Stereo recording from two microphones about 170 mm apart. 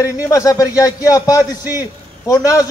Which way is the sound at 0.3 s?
20° left (ahead or behind).